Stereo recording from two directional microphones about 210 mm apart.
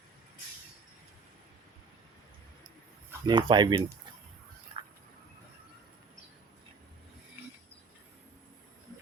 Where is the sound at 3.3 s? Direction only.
20° right (ahead or behind).